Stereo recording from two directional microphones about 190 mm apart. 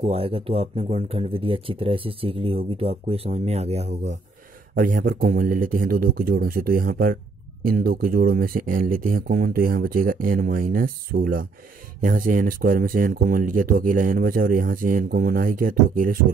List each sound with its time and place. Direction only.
0.0 s speech: 30° right (ahead or behind)
4.7 s speech: 45° right (ahead or behind)